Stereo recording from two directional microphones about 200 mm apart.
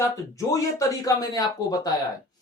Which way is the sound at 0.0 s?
15° left (ahead or behind).